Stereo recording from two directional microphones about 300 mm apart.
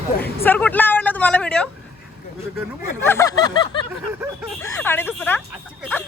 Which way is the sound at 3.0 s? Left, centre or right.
Centre.